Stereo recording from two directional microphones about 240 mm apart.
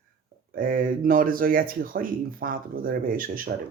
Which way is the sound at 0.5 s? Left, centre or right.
Right.